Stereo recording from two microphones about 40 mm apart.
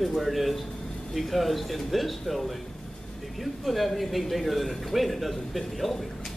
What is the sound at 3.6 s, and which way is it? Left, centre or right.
Speech, centre.